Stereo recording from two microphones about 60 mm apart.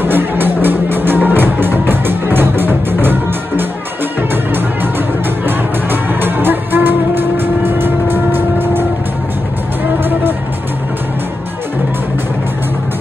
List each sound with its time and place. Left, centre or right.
0.0 s music: right
5.5 s music: right